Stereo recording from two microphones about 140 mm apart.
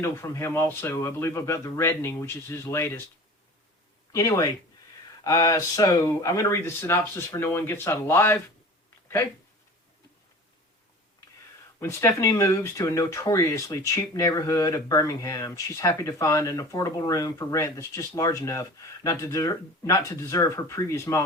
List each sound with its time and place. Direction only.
0.0 s speech: 20° left (ahead or behind)
4.1 s speech: 25° left (ahead or behind)
11.8 s speech: 20° left (ahead or behind)